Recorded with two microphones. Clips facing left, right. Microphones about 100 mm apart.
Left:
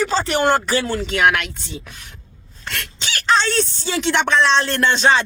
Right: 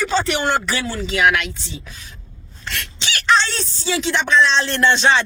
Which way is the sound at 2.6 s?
50° left (ahead or behind).